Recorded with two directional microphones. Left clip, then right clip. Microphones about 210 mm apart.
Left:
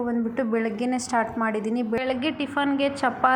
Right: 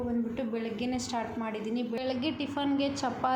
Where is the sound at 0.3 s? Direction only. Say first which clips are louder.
Left 9 dB; 10° left (ahead or behind).